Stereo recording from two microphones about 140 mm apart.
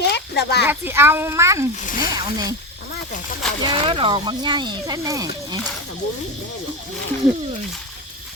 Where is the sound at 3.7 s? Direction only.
40° right (ahead or behind).